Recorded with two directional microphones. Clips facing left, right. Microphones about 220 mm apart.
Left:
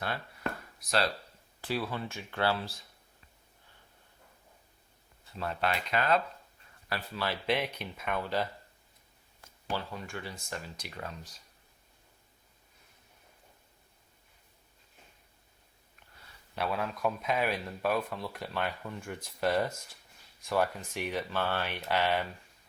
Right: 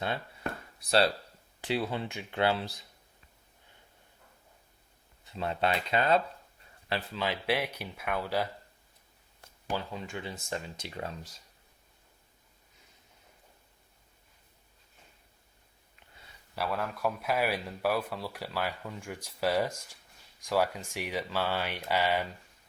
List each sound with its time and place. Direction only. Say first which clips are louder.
0.0 s a sound: right 1 dB; 25° right (ahead or behind)
1.6 s speech: right 3 dB; 20° right (ahead or behind)
5.2 s speech: right 3 dB; 25° right (ahead or behind); by 8.4 s 10° right (ahead or behind)
9.6 s speech: right 1 dB; 15° right (ahead or behind)
16.6 s speech: even; centre (ahead or behind)